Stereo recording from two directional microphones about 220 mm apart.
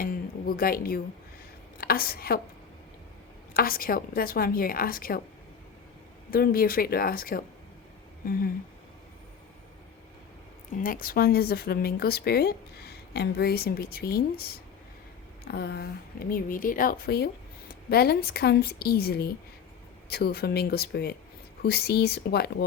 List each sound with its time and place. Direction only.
0.0 s a woman's voice: 40° left (ahead or behind)
3.5 s a woman's voice: 40° left (ahead or behind)
6.3 s a woman's voice: 40° left (ahead or behind)
8.2 s a sound: 40° left (ahead or behind)
10.8 s a woman's voice: 40° left (ahead or behind)